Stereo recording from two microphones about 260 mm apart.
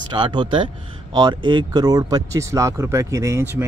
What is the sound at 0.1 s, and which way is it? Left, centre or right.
Speech, centre.